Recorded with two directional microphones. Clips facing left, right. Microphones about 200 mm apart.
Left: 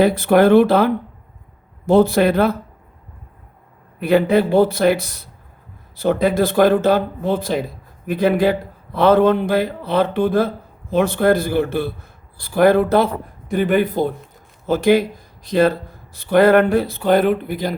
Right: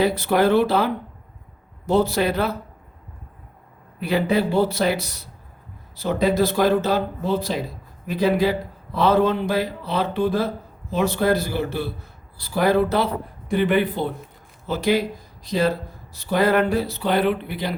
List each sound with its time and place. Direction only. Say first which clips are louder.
0.0 s speech: left 6 dB; 50° left (ahead or behind)
1.9 s speech: left 6 dB; 50° left (ahead or behind)
4.0 s speech: left 6 dB; 55° left (ahead or behind)